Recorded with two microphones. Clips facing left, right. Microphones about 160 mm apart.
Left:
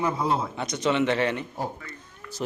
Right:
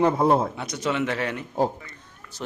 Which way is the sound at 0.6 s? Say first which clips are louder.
Left 2 dB; 5° right (ahead or behind).